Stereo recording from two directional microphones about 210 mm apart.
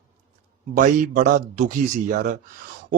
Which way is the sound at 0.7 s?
40° right (ahead or behind).